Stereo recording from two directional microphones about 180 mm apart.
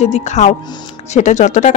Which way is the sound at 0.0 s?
40° left (ahead or behind).